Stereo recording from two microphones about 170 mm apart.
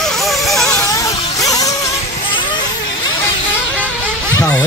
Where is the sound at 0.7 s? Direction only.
20° left (ahead or behind).